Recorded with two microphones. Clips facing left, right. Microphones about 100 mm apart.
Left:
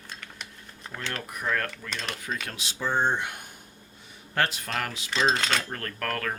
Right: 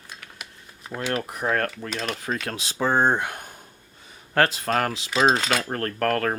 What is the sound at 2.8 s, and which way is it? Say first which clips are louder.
Speech: right 5 dB; 45° right (ahead or behind).